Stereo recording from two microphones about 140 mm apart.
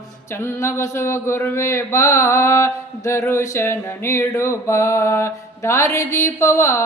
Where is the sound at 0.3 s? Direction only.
20° left (ahead or behind).